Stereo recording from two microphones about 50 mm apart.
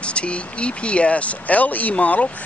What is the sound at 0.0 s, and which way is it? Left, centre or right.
Speech, left.